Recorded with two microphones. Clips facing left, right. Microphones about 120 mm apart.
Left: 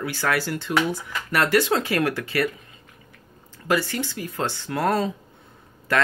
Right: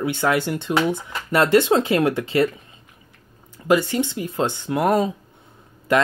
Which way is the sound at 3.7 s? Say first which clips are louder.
Right 5 dB; 20° right (ahead or behind).